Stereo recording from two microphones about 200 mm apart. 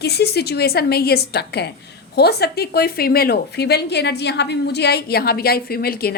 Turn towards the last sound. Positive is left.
turn(degrees=50)  # may be behind; listen again after turning